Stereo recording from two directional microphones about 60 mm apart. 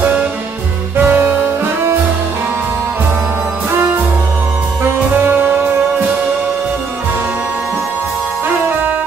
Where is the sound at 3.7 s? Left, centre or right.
Right.